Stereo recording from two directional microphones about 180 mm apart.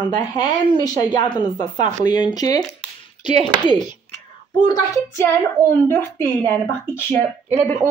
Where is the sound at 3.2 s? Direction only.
40° right (ahead or behind).